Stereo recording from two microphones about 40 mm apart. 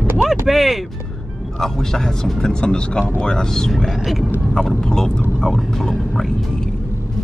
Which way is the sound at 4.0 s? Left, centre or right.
Centre.